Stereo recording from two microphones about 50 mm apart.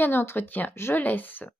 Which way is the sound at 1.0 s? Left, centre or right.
Left.